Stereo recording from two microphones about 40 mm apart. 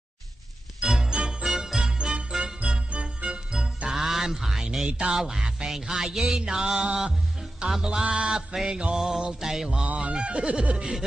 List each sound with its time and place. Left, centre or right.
0.8 s music: centre
1.1 s jingle bell: centre
2.6 s jingle bell: right
3.3 s music: centre
7.6 s speech: right
8.5 s music: centre
9.9 s speech: right